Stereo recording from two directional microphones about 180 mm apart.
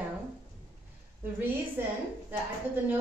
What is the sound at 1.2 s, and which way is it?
Speech, 10° right (ahead or behind).